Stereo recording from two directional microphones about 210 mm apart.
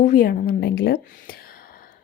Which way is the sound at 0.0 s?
40° left (ahead or behind).